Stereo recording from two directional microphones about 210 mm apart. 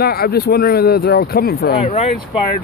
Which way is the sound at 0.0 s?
45° left (ahead or behind).